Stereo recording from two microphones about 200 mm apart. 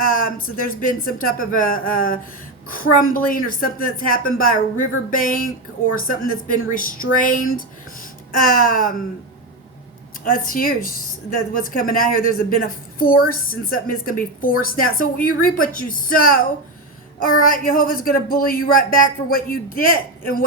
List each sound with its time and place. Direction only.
0.3 s a woman's voice: 45° left (ahead or behind)
8.4 s a woman's voice: 45° left (ahead or behind)
10.2 s a woman's voice: 45° left (ahead or behind)